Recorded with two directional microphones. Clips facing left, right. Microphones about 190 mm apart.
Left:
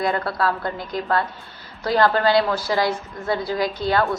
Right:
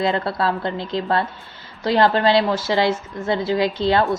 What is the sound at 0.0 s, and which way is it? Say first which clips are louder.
A woman's voice: right 2 dB; 25° right (ahead or behind).